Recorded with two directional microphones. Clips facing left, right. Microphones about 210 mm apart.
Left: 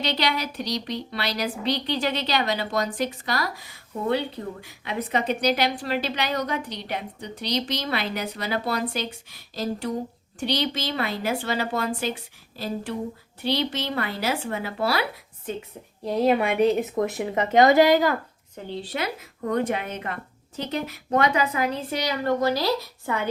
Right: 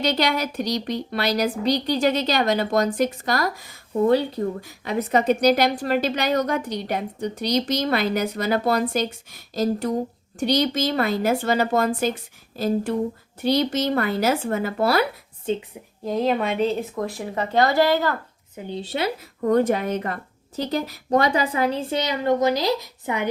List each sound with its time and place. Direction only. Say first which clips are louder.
0.0 s a woman's voice: right 4 dB; 45° right (ahead or behind)
15.5 s a woman's voice: right 7 dB; 25° right (ahead or behind)
16.0 s speech: left 1 dB; centre (ahead or behind)
18.8 s a woman's voice: right 4 dB; 25° right (ahead or behind)
19.5 s a woman's voice: right 6 dB; 40° right (ahead or behind); by 23.3 s 15° right (ahead or behind)